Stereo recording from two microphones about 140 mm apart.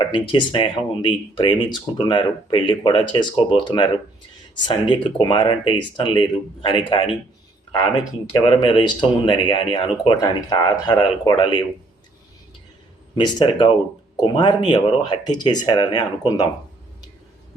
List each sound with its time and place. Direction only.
0.0 s speech: 35° left (ahead or behind)
8.4 s speech: 35° left (ahead or behind)
13.1 s speech: 35° left (ahead or behind)